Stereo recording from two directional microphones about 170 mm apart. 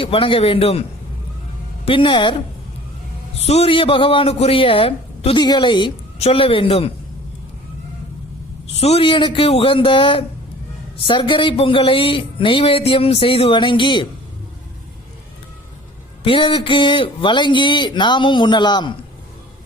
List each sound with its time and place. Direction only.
0.0 s a man's voice: 30° left (ahead or behind)
3.4 s a man's voice: 35° left (ahead or behind)
8.8 s a man's voice: 35° left (ahead or behind)
16.2 s a man's voice: 30° left (ahead or behind)